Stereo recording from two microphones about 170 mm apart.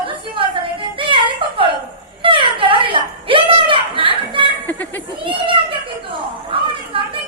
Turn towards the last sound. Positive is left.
turn(degrees=-30)  # may be behind; listen again after turning